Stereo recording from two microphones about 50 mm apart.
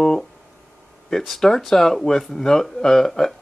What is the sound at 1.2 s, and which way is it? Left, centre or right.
Speech, centre.